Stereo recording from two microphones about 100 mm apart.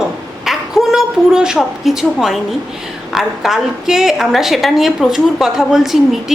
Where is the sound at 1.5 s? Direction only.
Centre (ahead or behind).